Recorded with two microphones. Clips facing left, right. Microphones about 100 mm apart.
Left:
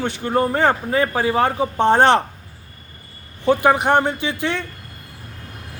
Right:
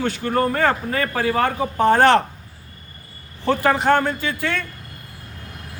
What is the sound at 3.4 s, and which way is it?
A man's voice, 15° left (ahead or behind).